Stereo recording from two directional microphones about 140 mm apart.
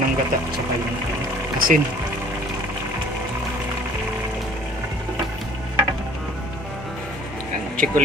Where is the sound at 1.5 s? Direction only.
90° right.